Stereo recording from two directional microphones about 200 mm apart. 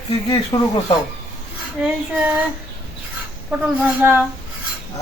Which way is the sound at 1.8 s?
5° right (ahead or behind).